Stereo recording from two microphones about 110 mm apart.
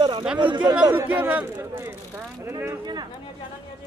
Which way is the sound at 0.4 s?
45° right (ahead or behind).